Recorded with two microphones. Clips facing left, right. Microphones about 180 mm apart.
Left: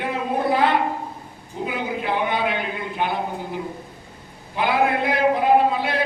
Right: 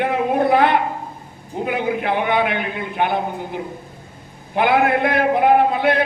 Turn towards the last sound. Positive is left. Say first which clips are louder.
# right 3 dB
turn(degrees=-60)  # may be behind; listen again after turning